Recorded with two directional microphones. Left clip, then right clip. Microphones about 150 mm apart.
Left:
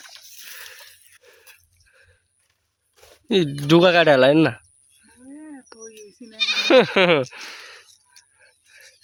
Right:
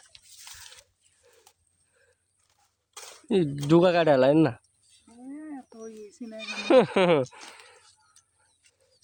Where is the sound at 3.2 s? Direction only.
5° left (ahead or behind).